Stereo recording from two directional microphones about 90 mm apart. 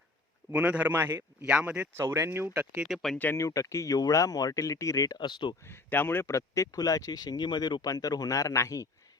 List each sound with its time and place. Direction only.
0.5 s a man's voice: 15° right (ahead or behind)
1.9 s speech: 30° right (ahead or behind)
2.8 s speech: centre (ahead or behind)
3.3 s speech: 35° left (ahead or behind); by 5.5 s 60° left (ahead or behind)
5.6 s speech: 25° left (ahead or behind)